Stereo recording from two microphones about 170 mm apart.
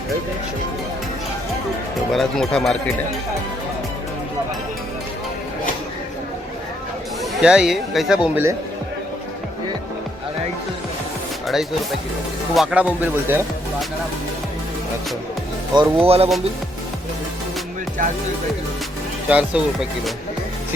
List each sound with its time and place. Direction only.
2.1 s speech: centre (ahead or behind)
7.4 s speech: 5° right (ahead or behind)
11.4 s speech: centre (ahead or behind)
15.7 s speech: 30° right (ahead or behind)
19.3 s speech: 5° right (ahead or behind)